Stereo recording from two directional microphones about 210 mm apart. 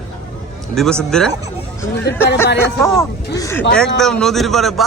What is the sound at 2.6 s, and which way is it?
A man's voice, 15° left (ahead or behind).